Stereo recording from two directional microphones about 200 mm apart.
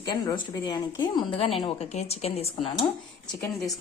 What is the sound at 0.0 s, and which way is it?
A woman's voice, 20° left (ahead or behind).